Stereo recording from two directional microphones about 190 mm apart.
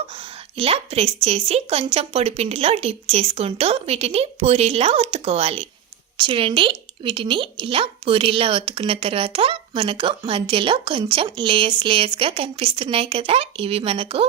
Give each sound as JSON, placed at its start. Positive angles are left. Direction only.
{"t": 0.5, "sound": "a woman's voice", "side_deg": -30}